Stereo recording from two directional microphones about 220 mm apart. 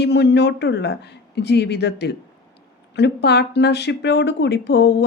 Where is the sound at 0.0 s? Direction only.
50° left (ahead or behind).